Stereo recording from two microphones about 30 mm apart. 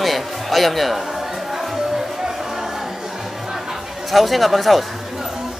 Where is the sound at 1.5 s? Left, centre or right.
Centre.